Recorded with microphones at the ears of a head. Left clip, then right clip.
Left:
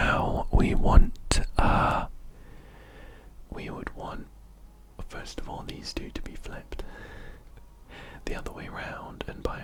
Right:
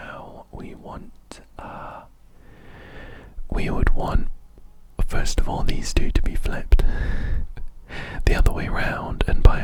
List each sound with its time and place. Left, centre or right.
0.0 s whispering: left
2.6 s whispering: right
4.9 s speech: right